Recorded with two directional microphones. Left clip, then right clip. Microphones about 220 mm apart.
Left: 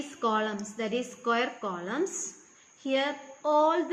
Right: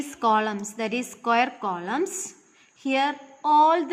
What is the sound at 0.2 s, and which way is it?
A woman's voice, 50° right (ahead or behind).